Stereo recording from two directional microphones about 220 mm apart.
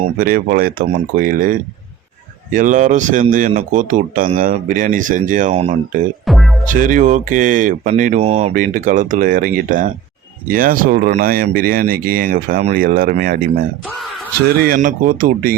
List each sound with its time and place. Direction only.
0.0 s speech: 40° right (ahead or behind)
6.2 s music: centre (ahead or behind)
6.7 s speech: 35° right (ahead or behind)
13.9 s speech: centre (ahead or behind)
14.5 s speech: 40° right (ahead or behind)